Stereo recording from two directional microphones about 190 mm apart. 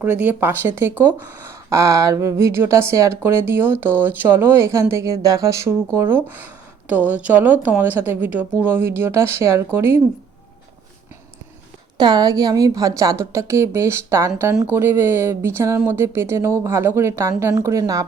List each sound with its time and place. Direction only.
0.0 s speech: 10° right (ahead or behind)
11.9 s speech: 20° right (ahead or behind)